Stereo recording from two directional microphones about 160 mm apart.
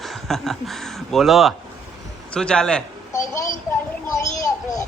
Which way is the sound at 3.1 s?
20° left (ahead or behind).